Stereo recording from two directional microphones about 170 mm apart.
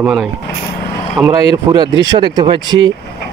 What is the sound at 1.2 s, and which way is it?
Speech, 20° right (ahead or behind).